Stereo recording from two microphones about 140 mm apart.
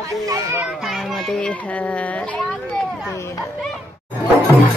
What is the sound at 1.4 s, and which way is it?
Speech, 10° left (ahead or behind).